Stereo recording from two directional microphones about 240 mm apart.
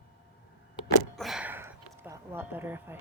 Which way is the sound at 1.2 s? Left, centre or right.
Centre.